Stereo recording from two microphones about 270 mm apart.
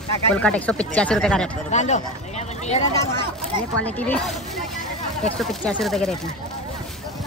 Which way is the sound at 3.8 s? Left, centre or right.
Centre.